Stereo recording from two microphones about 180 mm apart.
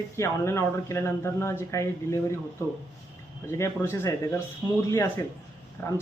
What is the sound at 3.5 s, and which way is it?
Speech, 15° left (ahead or behind).